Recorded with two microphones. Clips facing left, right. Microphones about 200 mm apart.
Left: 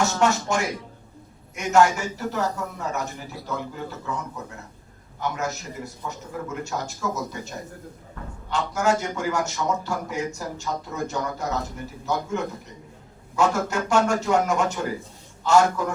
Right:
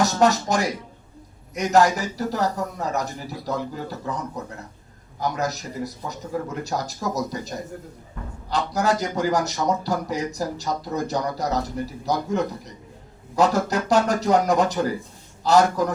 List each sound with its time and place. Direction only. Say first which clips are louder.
0.0 s a man's voice: right 3 dB; 35° right (ahead or behind)
5.2 s a man's voice: right 3 dB; 35° right (ahead or behind)